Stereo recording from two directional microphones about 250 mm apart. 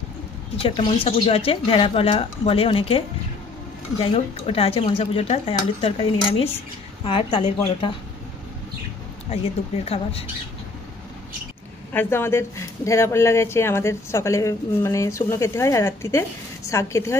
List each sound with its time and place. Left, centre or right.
0.6 s speech: left
4.0 s speech: left
11.9 s speech: centre